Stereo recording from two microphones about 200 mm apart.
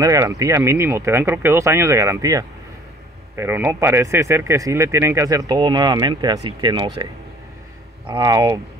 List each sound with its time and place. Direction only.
0.0 s speech: 15° right (ahead or behind)
8.1 s speech: 20° right (ahead or behind)